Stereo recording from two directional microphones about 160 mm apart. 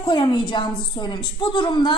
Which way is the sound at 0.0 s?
30° left (ahead or behind).